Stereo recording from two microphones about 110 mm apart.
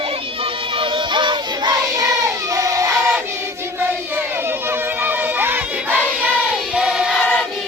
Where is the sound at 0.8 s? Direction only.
50° right (ahead or behind).